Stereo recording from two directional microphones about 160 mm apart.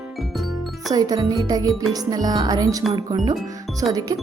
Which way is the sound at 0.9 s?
25° right (ahead or behind).